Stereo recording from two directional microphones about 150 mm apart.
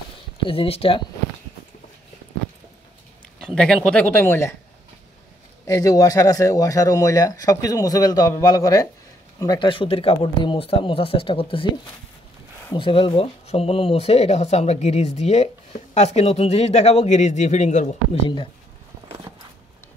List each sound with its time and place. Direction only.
0.5 s speech: 40° left (ahead or behind)
3.5 s speech: 5° left (ahead or behind)
5.7 s speech: 25° left (ahead or behind)
12.7 s speech: 35° left (ahead or behind); by 18.2 s 55° left (ahead or behind)
19.3 s a sound: 35° right (ahead or behind)